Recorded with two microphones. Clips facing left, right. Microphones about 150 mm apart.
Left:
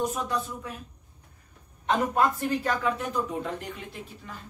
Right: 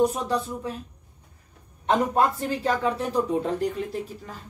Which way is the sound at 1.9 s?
30° right (ahead or behind).